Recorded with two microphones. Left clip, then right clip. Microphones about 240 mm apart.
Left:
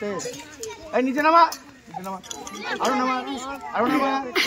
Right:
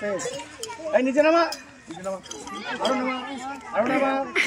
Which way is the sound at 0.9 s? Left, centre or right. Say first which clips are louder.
Right 2 dB; centre.